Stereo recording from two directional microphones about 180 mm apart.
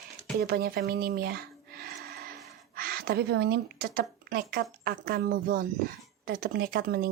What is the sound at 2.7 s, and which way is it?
Speech, 55° right (ahead or behind).